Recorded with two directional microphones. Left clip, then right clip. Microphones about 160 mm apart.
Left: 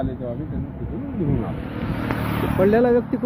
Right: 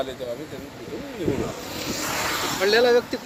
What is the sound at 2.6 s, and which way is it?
Speech, 10° right (ahead or behind).